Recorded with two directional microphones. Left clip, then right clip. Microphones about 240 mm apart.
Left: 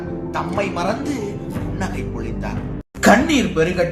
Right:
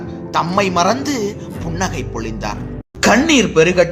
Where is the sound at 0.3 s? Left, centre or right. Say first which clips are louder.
Right 8 dB; right.